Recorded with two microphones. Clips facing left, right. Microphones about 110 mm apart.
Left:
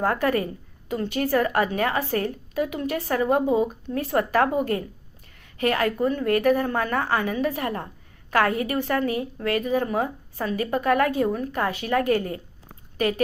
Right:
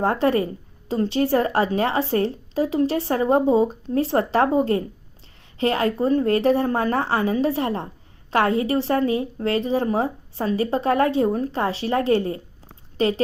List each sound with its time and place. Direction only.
0.0 s a woman's voice: 25° right (ahead or behind)